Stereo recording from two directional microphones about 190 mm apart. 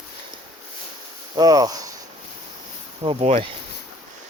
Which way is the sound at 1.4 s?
20° right (ahead or behind).